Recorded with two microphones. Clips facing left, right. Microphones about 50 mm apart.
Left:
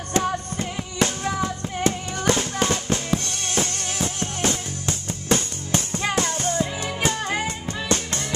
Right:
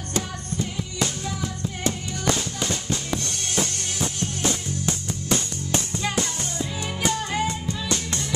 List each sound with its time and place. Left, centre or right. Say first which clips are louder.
0.1 s music: left 6 dB; left
4.2 s music: left 1 dB; left